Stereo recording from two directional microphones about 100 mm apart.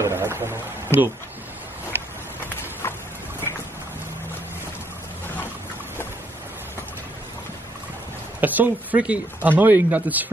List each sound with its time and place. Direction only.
0.0 s a sound: 25° right (ahead or behind)
2.8 s vehicle: 25° left (ahead or behind)
8.4 s speech: 15° right (ahead or behind)